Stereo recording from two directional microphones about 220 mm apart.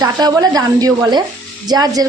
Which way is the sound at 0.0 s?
15° right (ahead or behind).